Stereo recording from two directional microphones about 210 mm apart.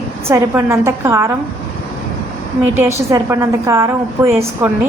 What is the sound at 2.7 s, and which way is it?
A woman's voice, 10° right (ahead or behind).